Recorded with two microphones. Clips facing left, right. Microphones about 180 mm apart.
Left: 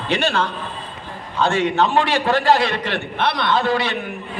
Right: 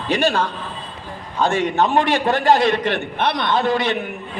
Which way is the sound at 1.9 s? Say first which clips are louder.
Right 1 dB; 45° right (ahead or behind).